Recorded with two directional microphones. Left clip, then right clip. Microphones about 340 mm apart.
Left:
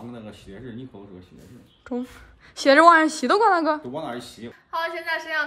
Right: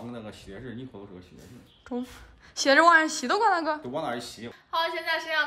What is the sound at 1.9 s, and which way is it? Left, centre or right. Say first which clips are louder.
A woman's voice: left 4 dB; centre.